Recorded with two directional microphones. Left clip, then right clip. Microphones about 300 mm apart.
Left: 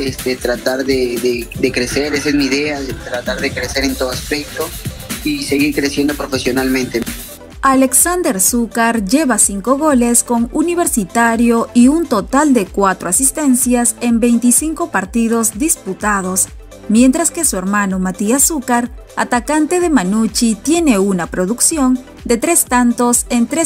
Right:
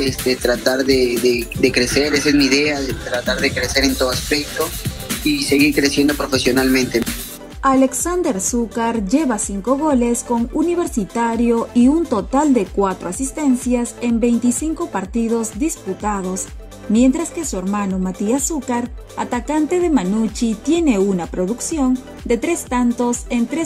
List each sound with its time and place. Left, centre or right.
0.0 s speech: centre
7.6 s speech: centre